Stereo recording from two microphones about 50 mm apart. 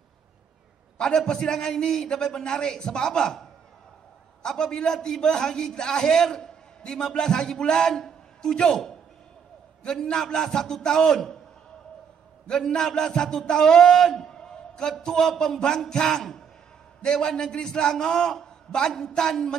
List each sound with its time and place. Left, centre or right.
0.9 s a man's voice: centre
9.8 s a man's voice: centre
12.4 s a man's voice: centre